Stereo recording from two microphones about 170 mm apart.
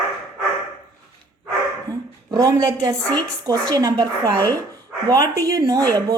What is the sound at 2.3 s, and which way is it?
A woman's voice, 20° right (ahead or behind).